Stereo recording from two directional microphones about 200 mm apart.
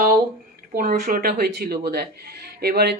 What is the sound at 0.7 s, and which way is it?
Speech, 45° right (ahead or behind).